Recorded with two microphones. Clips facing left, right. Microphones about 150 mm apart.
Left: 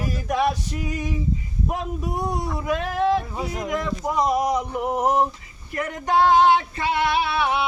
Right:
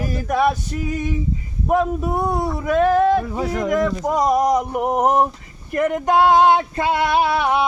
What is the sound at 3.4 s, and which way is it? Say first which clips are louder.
Speech: right 6 dB; 75° right (ahead or behind).